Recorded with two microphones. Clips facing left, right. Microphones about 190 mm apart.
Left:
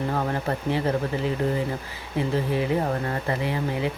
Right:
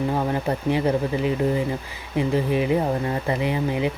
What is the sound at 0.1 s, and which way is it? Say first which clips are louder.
Speech: right 3 dB; 15° right (ahead or behind).